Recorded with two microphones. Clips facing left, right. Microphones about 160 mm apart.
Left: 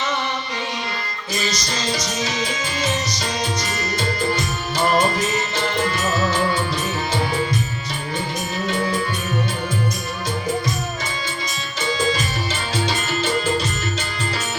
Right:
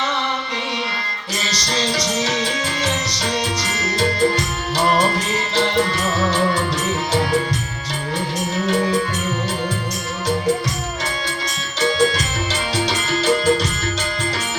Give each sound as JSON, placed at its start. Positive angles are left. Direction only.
{"t": 1.5, "sound": "music", "side_deg": -70}